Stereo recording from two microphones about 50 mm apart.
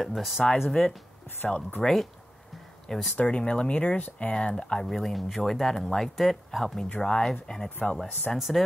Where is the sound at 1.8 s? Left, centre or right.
Centre.